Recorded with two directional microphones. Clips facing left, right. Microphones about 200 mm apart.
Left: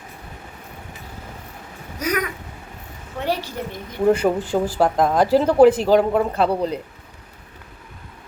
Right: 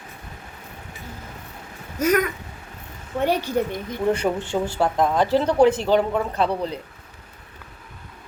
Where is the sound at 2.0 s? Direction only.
50° right (ahead or behind).